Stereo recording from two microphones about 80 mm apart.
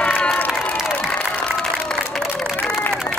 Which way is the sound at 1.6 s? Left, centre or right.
Centre.